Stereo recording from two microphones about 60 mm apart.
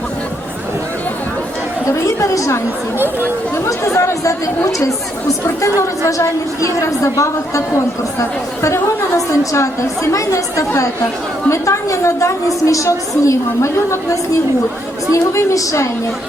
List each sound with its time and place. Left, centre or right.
1.9 s a woman's voice: left
3.8 s a woman's voice: left